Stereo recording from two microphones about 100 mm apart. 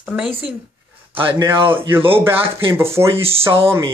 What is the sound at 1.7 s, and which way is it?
Speech, 20° right (ahead or behind).